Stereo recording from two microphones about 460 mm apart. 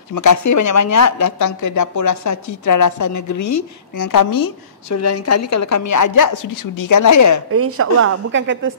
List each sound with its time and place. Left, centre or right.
0.1 s speech: left
7.5 s a woman's voice: right